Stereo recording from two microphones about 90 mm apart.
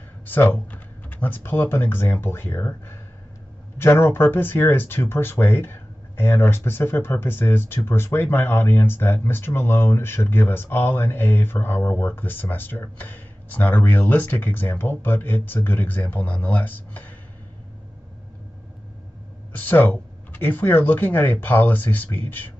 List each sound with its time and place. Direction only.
0.3 s speech: 20° left (ahead or behind)
19.5 s speech: 20° left (ahead or behind)